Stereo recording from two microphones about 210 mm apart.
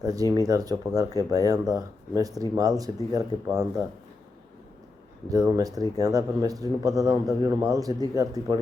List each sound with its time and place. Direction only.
0.0 s a man's voice: 15° right (ahead or behind)
5.3 s a man's voice: 15° right (ahead or behind)